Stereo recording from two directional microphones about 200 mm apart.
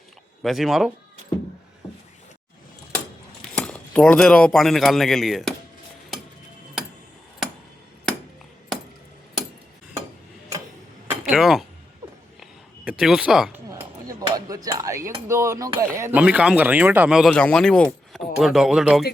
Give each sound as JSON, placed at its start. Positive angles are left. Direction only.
{"t": 0.4, "sound": "speech", "side_deg": 0}
{"t": 3.5, "sound": "speech", "side_deg": 5}
{"t": 11.3, "sound": "speech", "side_deg": 0}
{"t": 12.4, "sound": "a sound", "side_deg": -5}
{"t": 13.7, "sound": "cutlery", "side_deg": -15}
{"t": 15.3, "sound": "a sound", "side_deg": -15}
{"t": 15.9, "sound": "speech", "side_deg": -10}